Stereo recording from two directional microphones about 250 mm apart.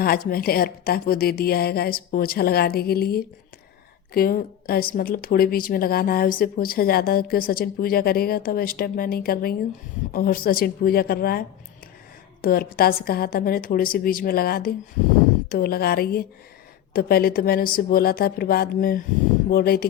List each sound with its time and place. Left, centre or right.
0.0 s speech: left